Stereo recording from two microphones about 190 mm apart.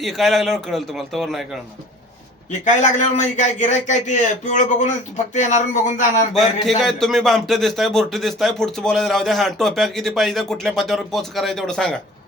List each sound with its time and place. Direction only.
0.0 s a man's voice: centre (ahead or behind)
2.5 s a man's voice: 40° left (ahead or behind)
6.7 s a man's voice: centre (ahead or behind)